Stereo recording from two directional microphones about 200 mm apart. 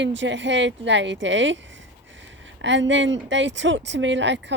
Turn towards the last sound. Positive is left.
turn(degrees=-60)  # may be behind; listen again after turning